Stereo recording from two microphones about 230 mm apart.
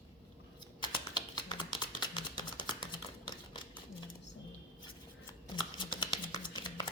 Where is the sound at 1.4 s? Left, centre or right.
Centre.